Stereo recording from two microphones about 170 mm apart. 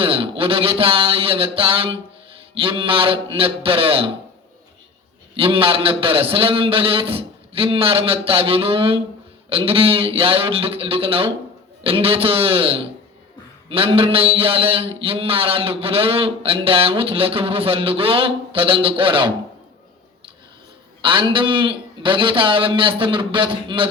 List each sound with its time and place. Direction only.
0.0 s a man's voice: 35° right (ahead or behind)
5.4 s a man's voice: 30° right (ahead or behind)
21.0 s a man's voice: 30° right (ahead or behind)